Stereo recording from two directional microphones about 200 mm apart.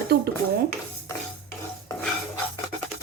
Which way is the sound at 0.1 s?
50° right (ahead or behind).